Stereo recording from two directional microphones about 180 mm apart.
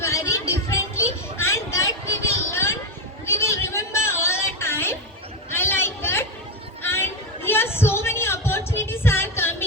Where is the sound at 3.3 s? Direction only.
15° left (ahead or behind).